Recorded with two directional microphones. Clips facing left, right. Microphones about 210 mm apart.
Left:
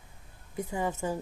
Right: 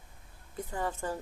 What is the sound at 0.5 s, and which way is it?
Speech, 10° left (ahead or behind).